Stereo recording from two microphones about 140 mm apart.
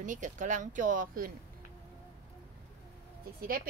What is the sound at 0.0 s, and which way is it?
Speech, 65° right (ahead or behind).